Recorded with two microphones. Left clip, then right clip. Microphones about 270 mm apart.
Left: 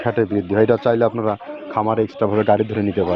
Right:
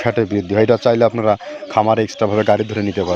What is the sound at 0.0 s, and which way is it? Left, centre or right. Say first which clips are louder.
Speech: right 2 dB; right.